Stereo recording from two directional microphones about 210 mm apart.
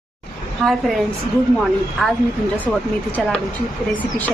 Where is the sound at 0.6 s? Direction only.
Centre (ahead or behind).